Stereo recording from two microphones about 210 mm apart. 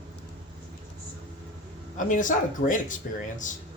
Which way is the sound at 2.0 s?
40° left (ahead or behind).